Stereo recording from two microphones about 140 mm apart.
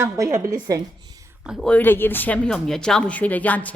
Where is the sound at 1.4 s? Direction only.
5° right (ahead or behind).